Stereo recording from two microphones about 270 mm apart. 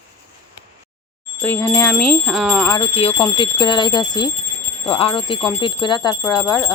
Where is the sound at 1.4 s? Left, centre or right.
Centre.